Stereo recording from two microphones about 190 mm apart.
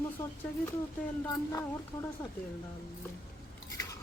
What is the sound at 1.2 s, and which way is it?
Speech, 15° left (ahead or behind).